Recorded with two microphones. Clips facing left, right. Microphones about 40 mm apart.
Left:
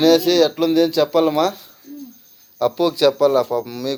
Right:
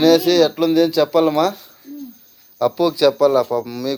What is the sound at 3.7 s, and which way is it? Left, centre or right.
Speech, centre.